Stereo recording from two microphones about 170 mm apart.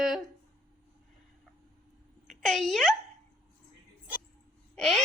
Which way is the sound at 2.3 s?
Centre (ahead or behind).